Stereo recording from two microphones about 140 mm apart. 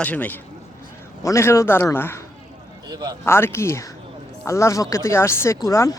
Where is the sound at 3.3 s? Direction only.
15° left (ahead or behind).